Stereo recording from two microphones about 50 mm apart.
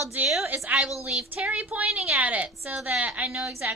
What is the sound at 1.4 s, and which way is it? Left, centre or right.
Speech, right.